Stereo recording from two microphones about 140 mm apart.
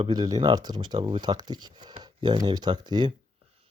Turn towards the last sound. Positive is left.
turn(degrees=-30)  # may be behind; listen again after turning